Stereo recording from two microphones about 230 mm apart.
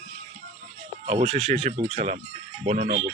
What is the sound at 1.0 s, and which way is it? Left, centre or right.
Speech, right.